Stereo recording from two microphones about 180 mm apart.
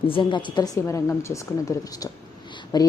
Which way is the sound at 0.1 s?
25° left (ahead or behind).